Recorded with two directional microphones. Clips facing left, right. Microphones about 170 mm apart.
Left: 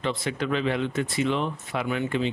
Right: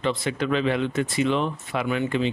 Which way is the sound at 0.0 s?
90° right.